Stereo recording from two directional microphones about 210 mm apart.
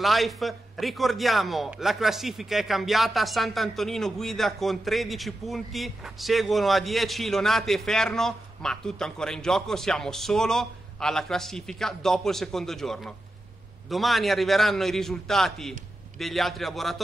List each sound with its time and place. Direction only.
0.0 s a man's voice: centre (ahead or behind)